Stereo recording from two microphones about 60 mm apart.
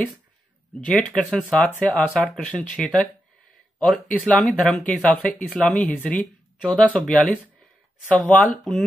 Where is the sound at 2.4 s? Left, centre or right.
Left.